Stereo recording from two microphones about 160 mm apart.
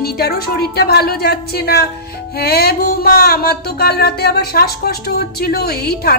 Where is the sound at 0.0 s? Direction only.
75° left (ahead or behind).